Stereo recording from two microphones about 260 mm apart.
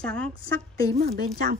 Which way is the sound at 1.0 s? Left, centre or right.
Right.